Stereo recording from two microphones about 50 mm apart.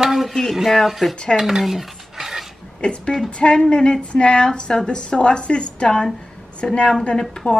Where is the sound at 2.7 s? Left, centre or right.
Centre.